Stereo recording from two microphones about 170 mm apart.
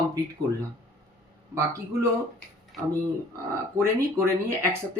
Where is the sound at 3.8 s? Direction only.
15° right (ahead or behind).